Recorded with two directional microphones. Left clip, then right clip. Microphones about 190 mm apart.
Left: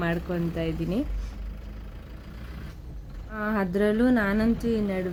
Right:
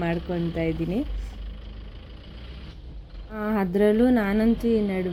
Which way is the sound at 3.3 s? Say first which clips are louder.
Right 2 dB; 10° right (ahead or behind).